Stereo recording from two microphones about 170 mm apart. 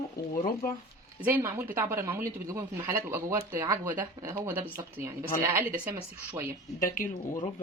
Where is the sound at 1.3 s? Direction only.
10° right (ahead or behind).